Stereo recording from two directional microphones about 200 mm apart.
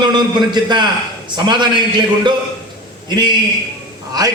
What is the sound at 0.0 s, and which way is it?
A man's voice, 20° right (ahead or behind).